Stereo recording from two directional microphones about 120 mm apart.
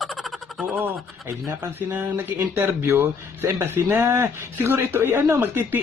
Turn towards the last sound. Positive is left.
turn(degrees=-20)  # may be behind; listen again after turning